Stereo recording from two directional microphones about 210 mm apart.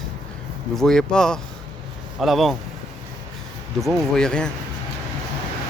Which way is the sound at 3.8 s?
Centre (ahead or behind).